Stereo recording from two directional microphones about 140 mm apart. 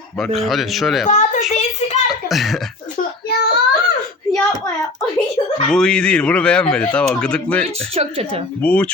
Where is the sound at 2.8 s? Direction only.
90° left.